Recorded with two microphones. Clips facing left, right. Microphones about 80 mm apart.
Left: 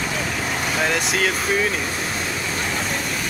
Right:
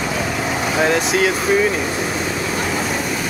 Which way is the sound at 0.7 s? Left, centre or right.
Centre.